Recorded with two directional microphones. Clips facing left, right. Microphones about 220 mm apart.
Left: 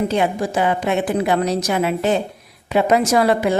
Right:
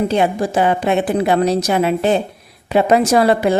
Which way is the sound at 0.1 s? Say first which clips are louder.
Right 3 dB; 30° right (ahead or behind).